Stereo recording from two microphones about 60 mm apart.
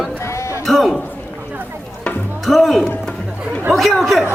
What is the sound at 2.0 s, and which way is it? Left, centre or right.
Music, centre.